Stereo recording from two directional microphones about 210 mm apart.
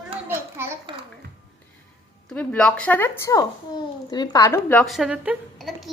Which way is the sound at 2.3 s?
5° left (ahead or behind).